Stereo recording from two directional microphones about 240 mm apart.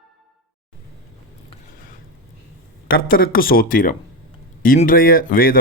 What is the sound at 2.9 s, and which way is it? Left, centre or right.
Speech, left.